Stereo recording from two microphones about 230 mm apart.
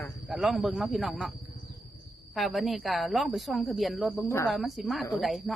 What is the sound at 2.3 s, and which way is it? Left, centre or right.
Speech, centre.